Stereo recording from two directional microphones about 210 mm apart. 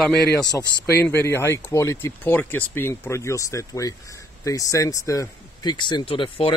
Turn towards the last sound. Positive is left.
turn(degrees=25)  # may be behind; listen again after turning